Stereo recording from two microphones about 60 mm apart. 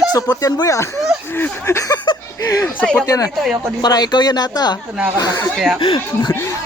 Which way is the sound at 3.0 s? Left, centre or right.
Left.